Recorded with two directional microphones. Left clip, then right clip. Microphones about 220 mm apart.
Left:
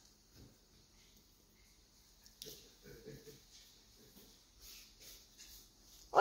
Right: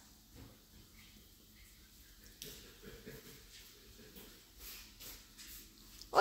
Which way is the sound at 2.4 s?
25° left (ahead or behind).